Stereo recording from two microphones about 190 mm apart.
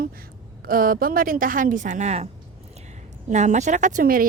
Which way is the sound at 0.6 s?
50° right (ahead or behind).